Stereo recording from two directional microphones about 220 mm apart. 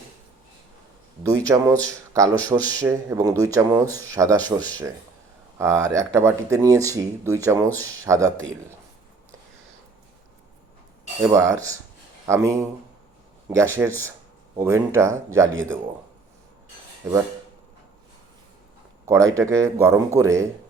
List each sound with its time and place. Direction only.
1.3 s speech: 15° right (ahead or behind)
11.2 s speech: 15° right (ahead or behind)
19.0 s speech: 15° right (ahead or behind)